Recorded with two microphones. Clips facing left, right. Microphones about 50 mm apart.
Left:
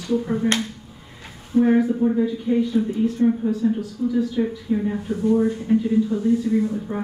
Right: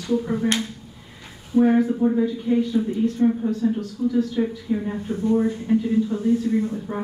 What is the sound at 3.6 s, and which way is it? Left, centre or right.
Speech, centre.